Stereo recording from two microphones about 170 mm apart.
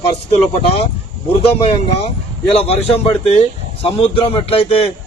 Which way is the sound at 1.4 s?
35° left (ahead or behind).